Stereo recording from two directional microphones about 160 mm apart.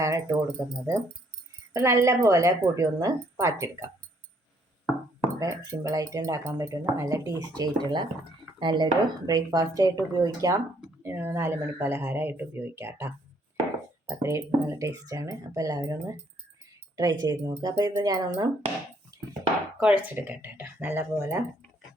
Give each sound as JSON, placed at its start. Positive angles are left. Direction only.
{"t": 0.0, "sound": "speech", "side_deg": -20}
{"t": 5.4, "sound": "speech", "side_deg": -20}
{"t": 19.1, "sound": "a sound", "side_deg": -20}
{"t": 19.8, "sound": "speech", "side_deg": -10}